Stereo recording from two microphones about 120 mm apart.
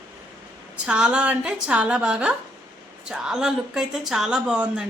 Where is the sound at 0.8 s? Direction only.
10° right (ahead or behind).